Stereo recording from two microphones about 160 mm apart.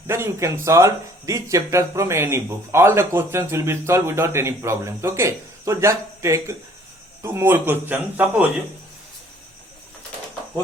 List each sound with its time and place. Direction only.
0.1 s speech: 15° right (ahead or behind)